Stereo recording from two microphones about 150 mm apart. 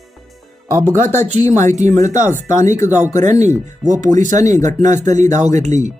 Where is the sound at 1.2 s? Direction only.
50° right (ahead or behind).